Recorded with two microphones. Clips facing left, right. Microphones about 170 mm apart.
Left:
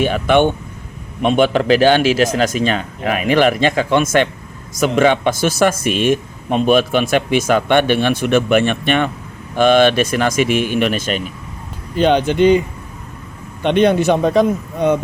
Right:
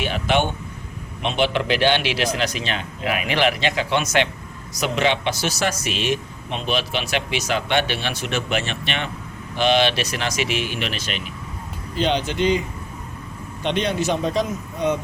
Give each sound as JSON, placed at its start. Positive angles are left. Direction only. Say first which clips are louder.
{"t": 1.2, "sound": "speech", "louder": "left 8 dB", "side_deg": 50}